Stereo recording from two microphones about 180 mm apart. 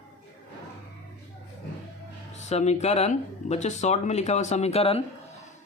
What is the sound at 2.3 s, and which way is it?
Speech, 40° left (ahead or behind).